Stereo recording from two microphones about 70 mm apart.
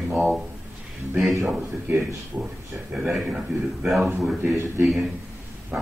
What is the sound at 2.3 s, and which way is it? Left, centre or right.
Speech, right.